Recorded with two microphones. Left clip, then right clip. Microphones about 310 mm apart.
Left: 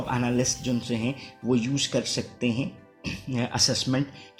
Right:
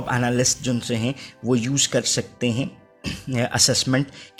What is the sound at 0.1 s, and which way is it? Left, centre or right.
Speech, right.